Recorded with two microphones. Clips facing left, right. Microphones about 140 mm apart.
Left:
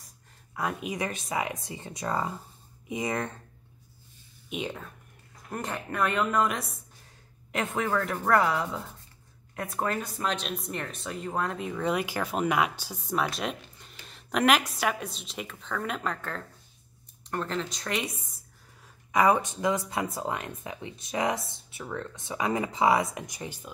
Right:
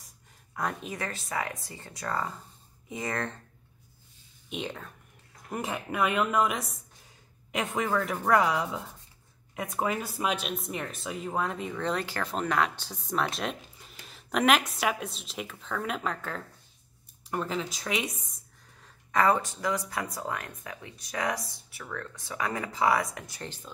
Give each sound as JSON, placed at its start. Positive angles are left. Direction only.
{"t": 0.6, "sound": "speech", "side_deg": 5}
{"t": 4.5, "sound": "speech", "side_deg": 5}